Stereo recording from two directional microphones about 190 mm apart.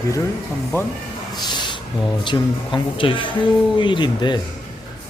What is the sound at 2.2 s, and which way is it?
Speech, 25° left (ahead or behind).